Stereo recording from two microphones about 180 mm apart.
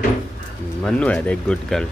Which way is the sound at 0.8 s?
5° left (ahead or behind).